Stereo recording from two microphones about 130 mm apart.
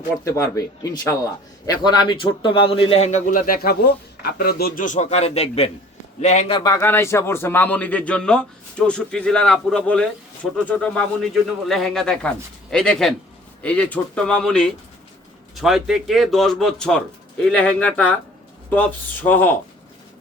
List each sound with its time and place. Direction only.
0.3 s a man's voice: 25° left (ahead or behind); by 3.0 s 45° left (ahead or behind)
3.0 s a man's voice: 70° left (ahead or behind)
6.5 s a man's voice: 30° left (ahead or behind)
6.7 s a man's voice: 20° left (ahead or behind)